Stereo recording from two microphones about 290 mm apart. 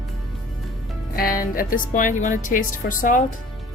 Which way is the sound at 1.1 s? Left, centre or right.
Left.